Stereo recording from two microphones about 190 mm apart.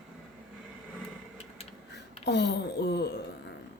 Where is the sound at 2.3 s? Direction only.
65° left (ahead or behind).